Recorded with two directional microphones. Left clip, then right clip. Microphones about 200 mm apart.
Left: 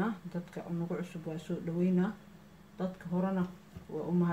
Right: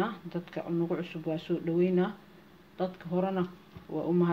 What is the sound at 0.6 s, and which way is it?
Speech, 40° right (ahead or behind).